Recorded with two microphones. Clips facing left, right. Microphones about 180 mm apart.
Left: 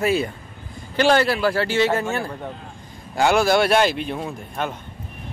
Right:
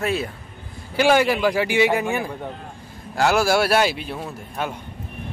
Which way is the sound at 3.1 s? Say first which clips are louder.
Left 1 dB; centre (ahead or behind).